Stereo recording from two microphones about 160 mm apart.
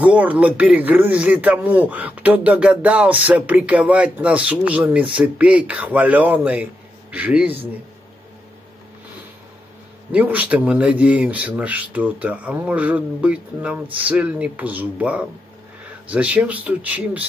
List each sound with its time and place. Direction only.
0.0 s speech: 10° right (ahead or behind)
10.1 s speech: 10° right (ahead or behind)